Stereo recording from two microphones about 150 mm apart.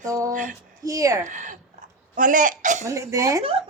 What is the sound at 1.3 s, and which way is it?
Speech, 55° right (ahead or behind).